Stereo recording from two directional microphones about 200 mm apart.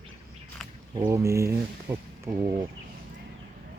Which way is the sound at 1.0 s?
15° right (ahead or behind).